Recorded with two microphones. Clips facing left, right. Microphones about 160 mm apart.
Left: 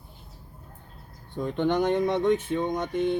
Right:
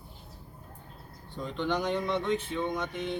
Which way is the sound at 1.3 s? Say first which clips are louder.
Left 6 dB; 55° left (ahead or behind).